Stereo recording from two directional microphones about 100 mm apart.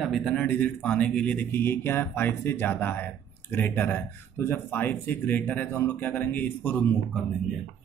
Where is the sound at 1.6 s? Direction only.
25° left (ahead or behind).